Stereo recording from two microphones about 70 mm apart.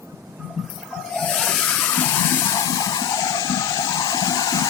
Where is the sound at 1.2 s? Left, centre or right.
Centre.